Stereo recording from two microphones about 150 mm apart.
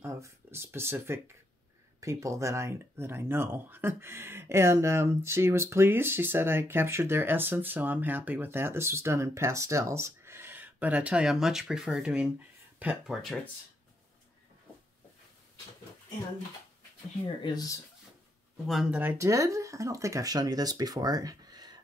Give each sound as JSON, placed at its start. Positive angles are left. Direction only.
{"t": 0.0, "sound": "speech", "side_deg": -15}
{"t": 17.4, "sound": "speech", "side_deg": 25}
{"t": 18.7, "sound": "speech", "side_deg": -5}